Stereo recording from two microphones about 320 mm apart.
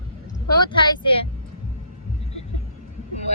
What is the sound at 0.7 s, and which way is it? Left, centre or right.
Speech, centre.